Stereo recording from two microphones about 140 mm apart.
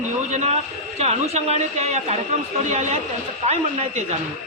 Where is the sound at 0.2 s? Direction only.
55° right (ahead or behind).